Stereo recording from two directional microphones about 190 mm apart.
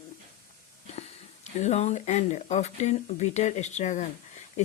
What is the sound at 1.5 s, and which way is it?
Speech, 35° left (ahead or behind).